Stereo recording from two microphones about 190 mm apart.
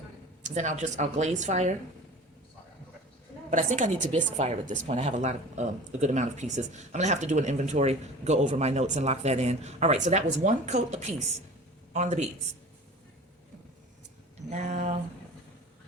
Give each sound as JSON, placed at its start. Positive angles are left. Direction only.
{"t": 0.4, "sound": "speech", "side_deg": -40}
{"t": 3.5, "sound": "speech", "side_deg": -40}
{"t": 14.5, "sound": "speech", "side_deg": -35}